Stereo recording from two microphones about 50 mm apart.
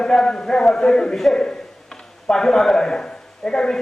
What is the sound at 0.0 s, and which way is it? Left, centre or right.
A man's voice, centre.